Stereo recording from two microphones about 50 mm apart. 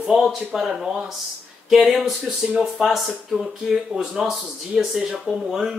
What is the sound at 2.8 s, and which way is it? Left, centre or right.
Speech, centre.